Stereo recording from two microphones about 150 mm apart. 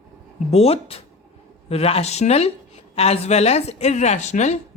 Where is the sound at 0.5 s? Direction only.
40° left (ahead or behind).